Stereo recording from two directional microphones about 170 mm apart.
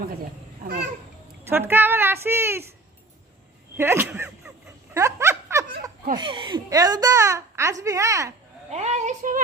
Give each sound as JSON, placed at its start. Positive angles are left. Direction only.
{"t": 1.5, "sound": "a woman's voice", "side_deg": -15}
{"t": 3.8, "sound": "a sound", "side_deg": -15}
{"t": 6.1, "sound": "speech", "side_deg": -30}
{"t": 8.7, "sound": "a woman's voice", "side_deg": -40}